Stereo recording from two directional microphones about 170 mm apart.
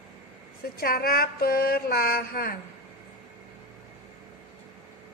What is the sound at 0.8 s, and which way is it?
A woman's voice, 60° left (ahead or behind).